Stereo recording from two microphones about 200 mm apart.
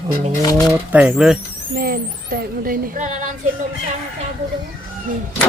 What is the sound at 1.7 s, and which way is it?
Speech, 50° right (ahead or behind).